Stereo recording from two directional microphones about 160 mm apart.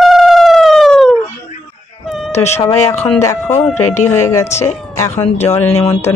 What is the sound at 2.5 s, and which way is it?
Speech, 15° left (ahead or behind).